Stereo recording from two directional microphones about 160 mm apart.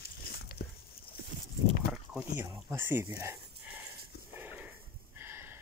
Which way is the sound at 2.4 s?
15° right (ahead or behind).